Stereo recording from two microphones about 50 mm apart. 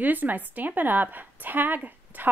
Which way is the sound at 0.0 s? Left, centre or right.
Right.